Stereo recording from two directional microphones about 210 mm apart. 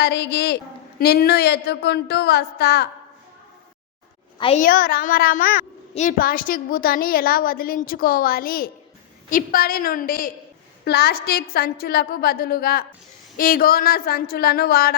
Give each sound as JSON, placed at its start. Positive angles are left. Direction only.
{"t": 0.0, "sound": "a woman's voice", "side_deg": 50}
{"t": 4.4, "sound": "a woman's voice", "side_deg": 25}
{"t": 4.6, "sound": "a woman's voice", "side_deg": 45}